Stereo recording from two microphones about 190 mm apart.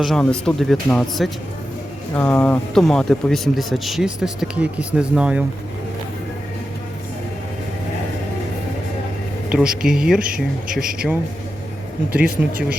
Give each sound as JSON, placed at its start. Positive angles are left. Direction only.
{"t": 0.0, "sound": "a man's voice", "side_deg": 5}
{"t": 9.5, "sound": "a man's voice", "side_deg": -5}
{"t": 10.2, "sound": "speech", "side_deg": -50}
{"t": 12.1, "sound": "speech", "side_deg": -55}